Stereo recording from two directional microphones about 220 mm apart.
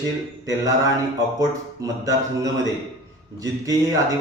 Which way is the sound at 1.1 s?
15° right (ahead or behind).